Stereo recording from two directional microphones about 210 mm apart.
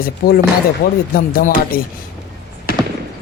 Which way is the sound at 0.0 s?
45° left (ahead or behind).